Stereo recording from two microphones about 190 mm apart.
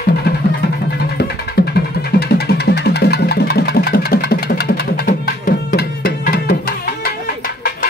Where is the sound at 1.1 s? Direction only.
60° left (ahead or behind).